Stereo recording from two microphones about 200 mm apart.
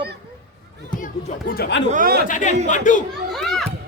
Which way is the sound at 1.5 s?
55° left (ahead or behind).